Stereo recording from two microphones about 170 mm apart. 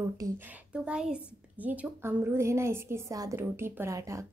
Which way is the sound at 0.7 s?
5° right (ahead or behind).